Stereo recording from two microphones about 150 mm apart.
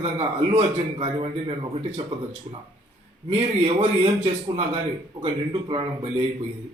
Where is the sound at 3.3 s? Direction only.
45° right (ahead or behind).